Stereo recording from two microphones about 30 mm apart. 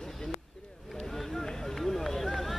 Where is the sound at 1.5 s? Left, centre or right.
Centre.